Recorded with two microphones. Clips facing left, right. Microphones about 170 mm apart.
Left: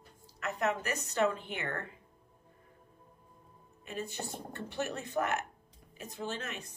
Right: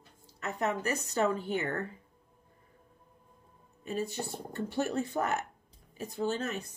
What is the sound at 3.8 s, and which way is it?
Speech, 35° right (ahead or behind).